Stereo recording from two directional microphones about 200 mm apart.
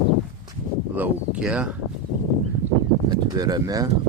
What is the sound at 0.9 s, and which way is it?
Speech, 5° right (ahead or behind).